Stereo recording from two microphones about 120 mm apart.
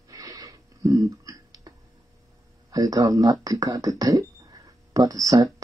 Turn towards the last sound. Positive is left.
turn(degrees=-30)  # may be behind; listen again after turning